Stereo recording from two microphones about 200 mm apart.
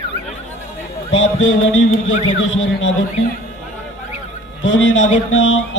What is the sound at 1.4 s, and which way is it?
A man's voice, 70° left (ahead or behind).